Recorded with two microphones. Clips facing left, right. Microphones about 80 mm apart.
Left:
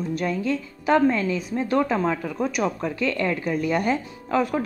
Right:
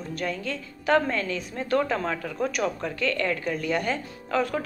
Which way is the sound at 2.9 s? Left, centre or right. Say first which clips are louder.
Left 2 dB; centre.